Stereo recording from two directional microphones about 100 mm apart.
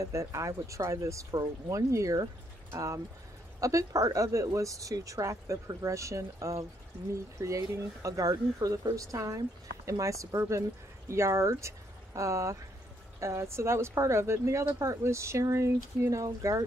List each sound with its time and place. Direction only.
0.0 s speech: 30° right (ahead or behind)